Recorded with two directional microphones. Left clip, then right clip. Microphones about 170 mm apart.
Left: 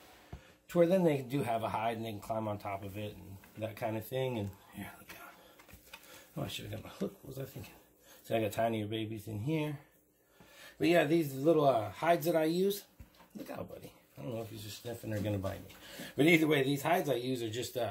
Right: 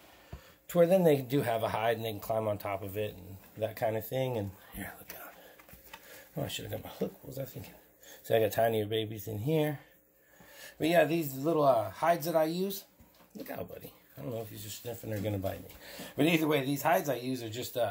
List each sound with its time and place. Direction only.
0.7 s speech: 35° right (ahead or behind); by 3.1 s 55° right (ahead or behind)
3.5 s speech: 45° right (ahead or behind)
6.4 s speech: 35° right (ahead or behind)
8.3 s speech: 45° right (ahead or behind)
10.8 s speech: 20° right (ahead or behind)
14.2 s speech: 25° right (ahead or behind)
16.2 s speech: 15° right (ahead or behind)